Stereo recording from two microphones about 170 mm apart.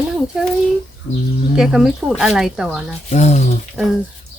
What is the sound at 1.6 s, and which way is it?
Speech, 5° right (ahead or behind).